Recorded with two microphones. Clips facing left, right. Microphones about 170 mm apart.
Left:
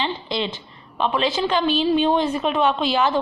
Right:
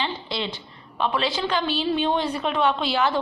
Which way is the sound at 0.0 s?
20° left (ahead or behind).